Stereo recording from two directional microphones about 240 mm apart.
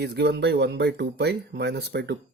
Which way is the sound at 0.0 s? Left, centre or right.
Right.